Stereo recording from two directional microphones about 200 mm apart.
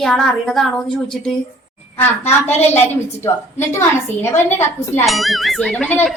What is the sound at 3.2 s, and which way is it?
A woman's voice, 10° left (ahead or behind).